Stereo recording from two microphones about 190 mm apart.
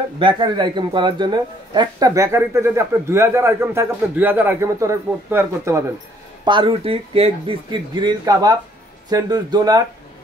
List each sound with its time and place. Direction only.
0.2 s a man's voice: 25° right (ahead or behind)
6.4 s speech: 25° right (ahead or behind)